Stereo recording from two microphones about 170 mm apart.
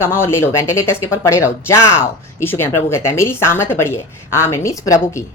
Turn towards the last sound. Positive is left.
turn(degrees=20)  # may be behind; listen again after turning